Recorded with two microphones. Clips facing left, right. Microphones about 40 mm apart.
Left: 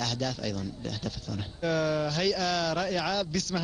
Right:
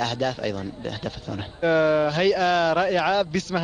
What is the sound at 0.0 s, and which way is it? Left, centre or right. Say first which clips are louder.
Speech: right 7 dB; right.